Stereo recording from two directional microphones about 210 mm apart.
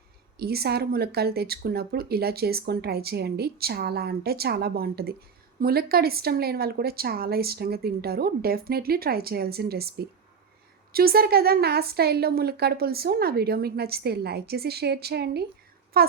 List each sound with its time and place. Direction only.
0.3 s speech: 50° right (ahead or behind)